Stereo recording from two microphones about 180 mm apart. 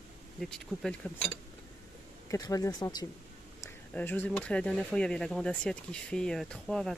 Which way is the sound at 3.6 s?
10° left (ahead or behind).